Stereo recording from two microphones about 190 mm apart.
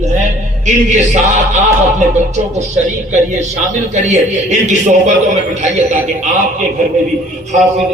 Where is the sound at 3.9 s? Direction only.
40° right (ahead or behind).